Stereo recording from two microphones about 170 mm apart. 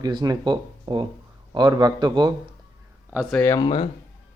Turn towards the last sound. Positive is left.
turn(degrees=30)  # may be behind; listen again after turning